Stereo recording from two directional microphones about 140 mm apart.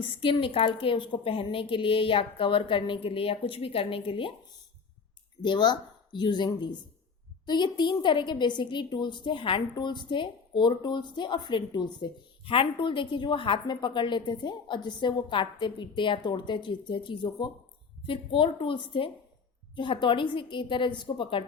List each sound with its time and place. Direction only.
0.2 s a woman's voice: 40° left (ahead or behind)